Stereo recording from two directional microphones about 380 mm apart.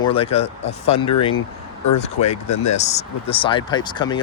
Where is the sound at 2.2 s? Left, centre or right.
Centre.